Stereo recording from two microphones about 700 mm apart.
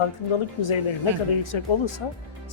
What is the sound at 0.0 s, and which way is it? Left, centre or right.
Speech, left.